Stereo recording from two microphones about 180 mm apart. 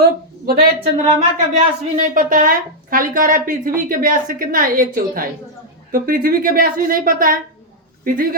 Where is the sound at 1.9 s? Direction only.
45° right (ahead or behind).